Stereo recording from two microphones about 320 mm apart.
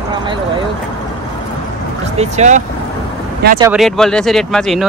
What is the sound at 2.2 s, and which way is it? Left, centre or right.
Speech, right.